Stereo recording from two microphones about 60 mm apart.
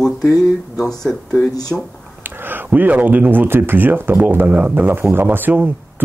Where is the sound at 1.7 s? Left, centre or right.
Centre.